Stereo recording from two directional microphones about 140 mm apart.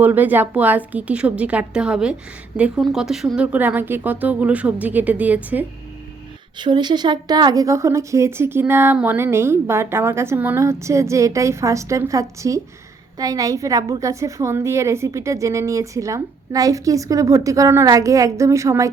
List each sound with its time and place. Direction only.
0.0 s speech: 10° right (ahead or behind)
6.6 s speech: 30° right (ahead or behind)